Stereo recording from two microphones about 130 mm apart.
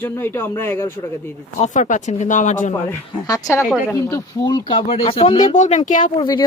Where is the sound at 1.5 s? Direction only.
65° left (ahead or behind).